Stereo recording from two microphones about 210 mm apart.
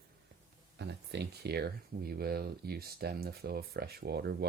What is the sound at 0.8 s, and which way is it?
Speech, 50° right (ahead or behind).